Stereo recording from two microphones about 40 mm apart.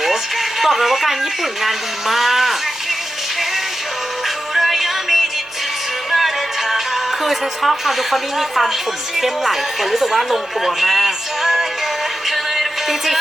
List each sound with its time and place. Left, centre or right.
0.6 s speech: centre
4.5 s music: centre
9.1 s speech: centre
12.3 s music: centre